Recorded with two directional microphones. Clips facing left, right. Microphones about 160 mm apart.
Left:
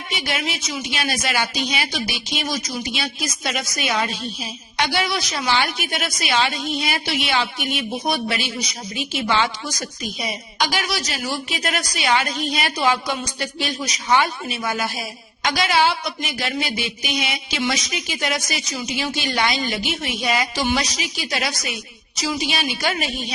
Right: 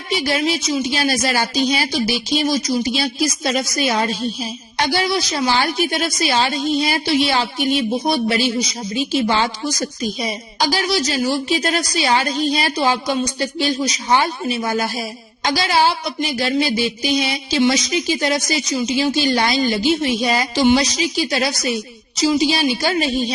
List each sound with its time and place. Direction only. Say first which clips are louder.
0.1 s a woman's voice: right 8 dB; 35° right (ahead or behind)